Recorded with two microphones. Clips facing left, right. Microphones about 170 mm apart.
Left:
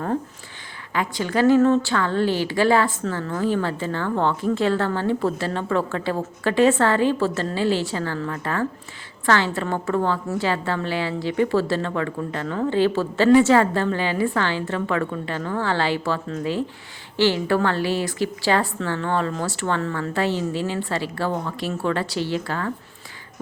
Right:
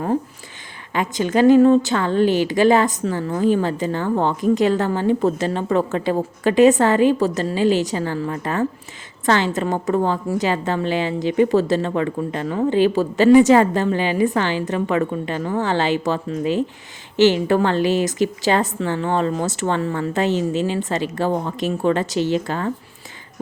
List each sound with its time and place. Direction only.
0.9 s a woman's voice: 20° right (ahead or behind)